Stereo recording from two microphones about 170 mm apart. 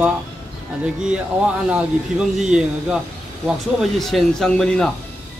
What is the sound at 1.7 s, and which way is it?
Speech, 5° right (ahead or behind).